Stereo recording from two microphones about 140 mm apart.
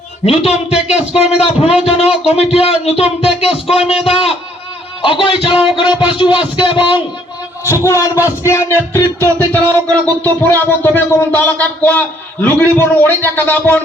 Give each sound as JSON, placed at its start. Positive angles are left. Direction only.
{"t": 0.3, "sound": "a man's voice", "side_deg": 45}
{"t": 7.7, "sound": "music", "side_deg": 20}
{"t": 9.5, "sound": "speech", "side_deg": 15}